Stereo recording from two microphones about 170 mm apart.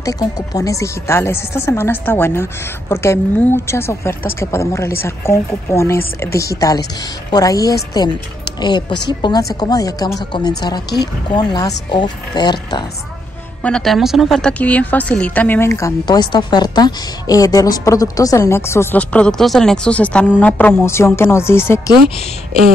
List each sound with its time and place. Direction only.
0.0 s a woman's voice: 20° left (ahead or behind)
13.6 s a woman's voice: 5° left (ahead or behind)